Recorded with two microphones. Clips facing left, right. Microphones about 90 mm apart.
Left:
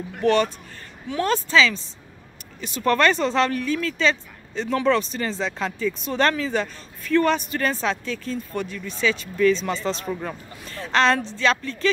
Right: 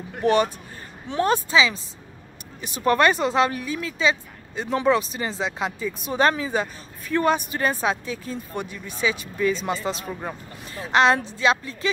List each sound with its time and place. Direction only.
0.2 s speech: 15° right (ahead or behind)
1.0 s speech: 30° right (ahead or behind)
1.3 s speech: 15° right (ahead or behind)